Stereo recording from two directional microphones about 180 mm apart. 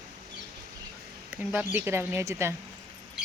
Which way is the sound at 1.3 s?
10° right (ahead or behind).